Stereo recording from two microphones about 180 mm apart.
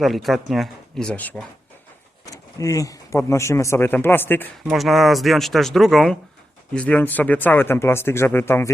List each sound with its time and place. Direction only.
0.0 s speech: centre (ahead or behind)
4.7 s speech: centre (ahead or behind)